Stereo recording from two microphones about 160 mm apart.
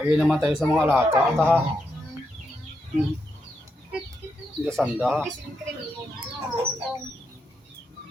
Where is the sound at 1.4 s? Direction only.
10° left (ahead or behind).